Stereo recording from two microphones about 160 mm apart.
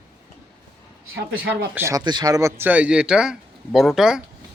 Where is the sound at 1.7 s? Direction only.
20° right (ahead or behind); by 4.2 s 5° right (ahead or behind).